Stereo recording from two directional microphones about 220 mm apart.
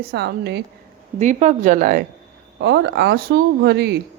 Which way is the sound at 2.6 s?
50° right (ahead or behind).